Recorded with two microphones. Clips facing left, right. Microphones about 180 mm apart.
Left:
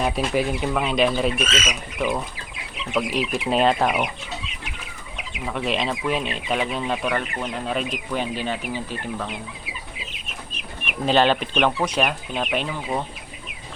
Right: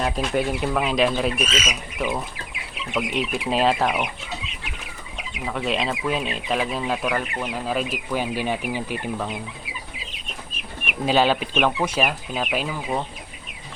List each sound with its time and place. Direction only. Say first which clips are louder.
0.0 s speech: left 1 dB; 5° left (ahead or behind)
1.5 s speech: left 1 dB; 10° right (ahead or behind)
5.5 s speech: even; centre (ahead or behind)
10.8 s speech: left 1 dB; 10° right (ahead or behind)